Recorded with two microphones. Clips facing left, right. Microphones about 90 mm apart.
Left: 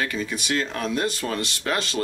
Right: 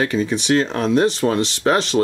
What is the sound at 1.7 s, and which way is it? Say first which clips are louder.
Speech: right 9 dB; 40° right (ahead or behind).